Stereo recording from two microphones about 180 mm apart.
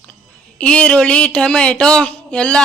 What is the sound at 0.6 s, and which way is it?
Speech, 5° left (ahead or behind).